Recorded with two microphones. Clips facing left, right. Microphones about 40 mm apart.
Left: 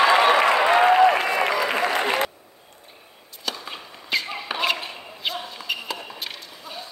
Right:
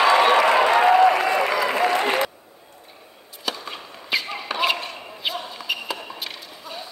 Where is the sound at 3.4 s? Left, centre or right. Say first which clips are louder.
Right 2 dB; centre.